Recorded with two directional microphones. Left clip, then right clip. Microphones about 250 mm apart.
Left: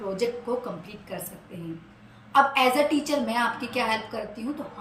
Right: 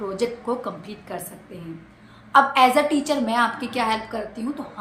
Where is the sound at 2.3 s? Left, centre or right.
Centre.